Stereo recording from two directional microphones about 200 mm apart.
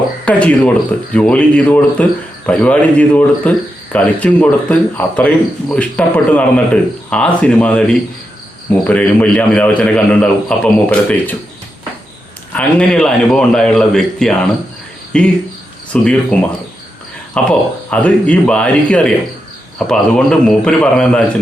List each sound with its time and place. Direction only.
0.3 s a man's voice: 5° left (ahead or behind)
12.5 s a man's voice: 5° left (ahead or behind)